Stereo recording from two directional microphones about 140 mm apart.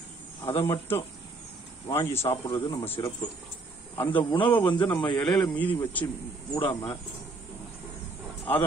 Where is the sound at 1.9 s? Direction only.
15° left (ahead or behind).